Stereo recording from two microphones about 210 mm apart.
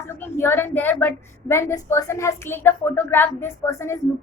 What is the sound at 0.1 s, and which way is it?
A woman's voice, 10° left (ahead or behind).